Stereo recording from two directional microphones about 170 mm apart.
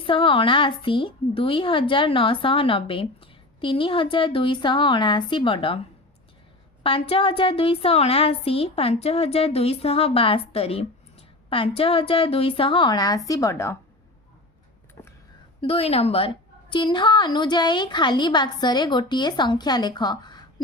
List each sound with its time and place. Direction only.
0.0 s a woman's voice: 30° left (ahead or behind)
6.8 s a woman's voice: 35° left (ahead or behind); by 13.7 s 15° left (ahead or behind)
15.0 s a sound: 25° left (ahead or behind)
15.6 s a woman's voice: 35° left (ahead or behind)